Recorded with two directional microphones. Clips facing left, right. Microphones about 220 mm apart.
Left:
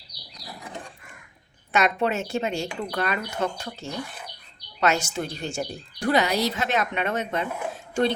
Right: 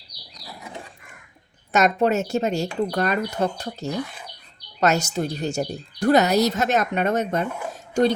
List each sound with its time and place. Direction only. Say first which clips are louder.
1.7 s a woman's voice: right 4 dB; 40° right (ahead or behind)